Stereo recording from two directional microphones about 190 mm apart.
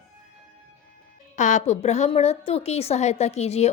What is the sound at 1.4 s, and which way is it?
A woman's voice, 40° left (ahead or behind).